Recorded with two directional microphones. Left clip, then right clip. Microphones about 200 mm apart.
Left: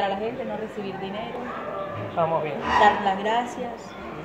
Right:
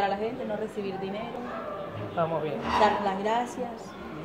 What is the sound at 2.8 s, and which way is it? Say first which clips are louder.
Speech: left 5 dB; 30° right (ahead or behind).